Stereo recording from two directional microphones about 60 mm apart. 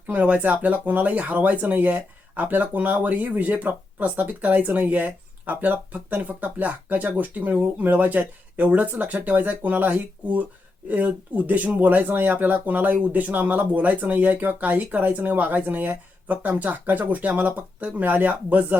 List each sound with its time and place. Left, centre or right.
0.1 s speech: right